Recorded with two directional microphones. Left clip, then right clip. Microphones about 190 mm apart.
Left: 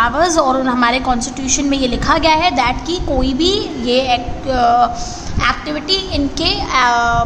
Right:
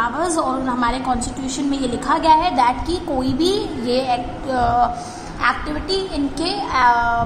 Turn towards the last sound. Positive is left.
turn(degrees=20)  # may be behind; listen again after turning